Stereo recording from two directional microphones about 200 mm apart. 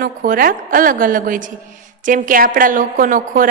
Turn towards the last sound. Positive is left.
turn(degrees=-45)  # may be behind; listen again after turning